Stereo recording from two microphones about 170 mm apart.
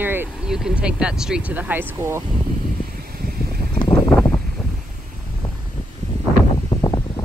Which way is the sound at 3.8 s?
20° left (ahead or behind).